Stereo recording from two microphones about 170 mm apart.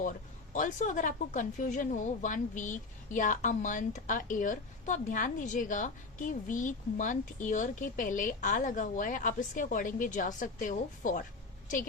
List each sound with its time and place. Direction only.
0.5 s a woman's voice: 50° left (ahead or behind)